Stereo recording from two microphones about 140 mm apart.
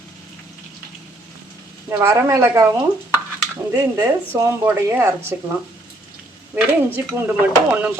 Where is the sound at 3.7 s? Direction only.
20° right (ahead or behind).